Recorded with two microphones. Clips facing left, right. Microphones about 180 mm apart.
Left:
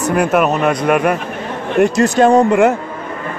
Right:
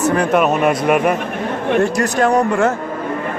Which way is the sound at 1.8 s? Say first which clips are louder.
Left 8 dB; 25° left (ahead or behind).